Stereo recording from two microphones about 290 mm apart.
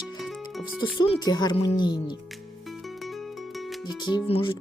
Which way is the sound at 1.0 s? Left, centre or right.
Centre.